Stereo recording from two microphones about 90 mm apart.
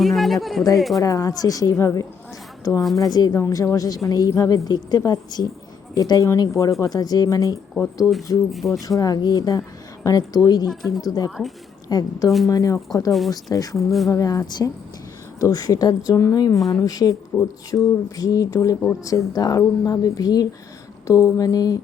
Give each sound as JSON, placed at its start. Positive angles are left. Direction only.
{"t": 0.0, "sound": "a sound", "side_deg": 0}
{"t": 0.8, "sound": "speech", "side_deg": 0}
{"t": 1.0, "sound": "speech", "side_deg": 45}
{"t": 2.8, "sound": "speech", "side_deg": 0}
{"t": 3.1, "sound": "a woman's voice", "side_deg": 45}
{"t": 8.5, "sound": "speech", "side_deg": 0}
{"t": 8.8, "sound": "a woman's voice", "side_deg": 45}
{"t": 10.7, "sound": "speech", "side_deg": 0}
{"t": 11.0, "sound": "a woman's voice", "side_deg": 45}
{"t": 13.7, "sound": "speech", "side_deg": 0}
{"t": 14.1, "sound": "a woman's voice", "side_deg": 40}
{"t": 16.6, "sound": "speech", "side_deg": 0}
{"t": 16.8, "sound": "a woman's voice", "side_deg": 45}